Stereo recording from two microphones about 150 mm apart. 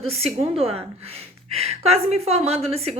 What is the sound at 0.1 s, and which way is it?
A woman's voice, 40° right (ahead or behind).